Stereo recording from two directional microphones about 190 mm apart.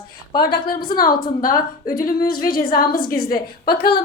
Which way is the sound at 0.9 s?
50° left (ahead or behind).